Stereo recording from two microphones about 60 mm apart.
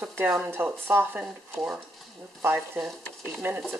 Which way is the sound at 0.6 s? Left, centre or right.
Right.